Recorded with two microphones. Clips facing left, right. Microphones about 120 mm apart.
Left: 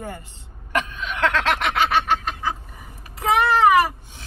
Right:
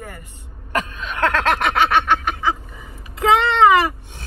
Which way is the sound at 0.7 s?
40° right (ahead or behind).